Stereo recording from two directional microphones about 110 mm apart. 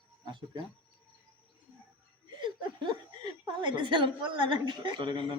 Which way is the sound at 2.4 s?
45° right (ahead or behind).